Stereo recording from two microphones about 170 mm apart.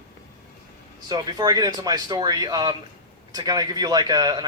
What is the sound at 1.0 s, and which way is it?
A man's voice, 25° right (ahead or behind).